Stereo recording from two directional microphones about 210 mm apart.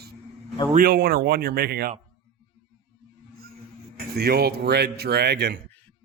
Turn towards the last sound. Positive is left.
turn(degrees=-50)  # may be behind; listen again after turning